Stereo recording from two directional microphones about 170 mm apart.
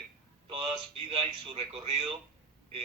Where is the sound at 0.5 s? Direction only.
30° right (ahead or behind).